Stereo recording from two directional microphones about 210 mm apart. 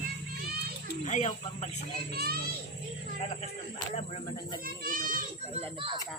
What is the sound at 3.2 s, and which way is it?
Speech, 30° left (ahead or behind).